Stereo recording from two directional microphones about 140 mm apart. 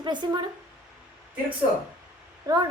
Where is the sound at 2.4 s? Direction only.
30° right (ahead or behind).